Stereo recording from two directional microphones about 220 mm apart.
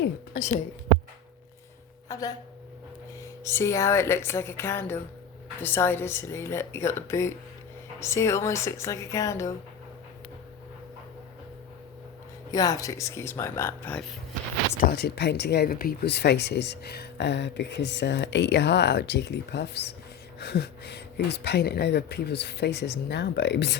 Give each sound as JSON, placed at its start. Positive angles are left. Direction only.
{"t": 0.0, "sound": "a sound", "side_deg": 40}
{"t": 2.0, "sound": "speech", "side_deg": 15}
{"t": 3.4, "sound": "speech", "side_deg": 10}
{"t": 12.5, "sound": "speech", "side_deg": 15}
{"t": 14.8, "sound": "speech", "side_deg": 45}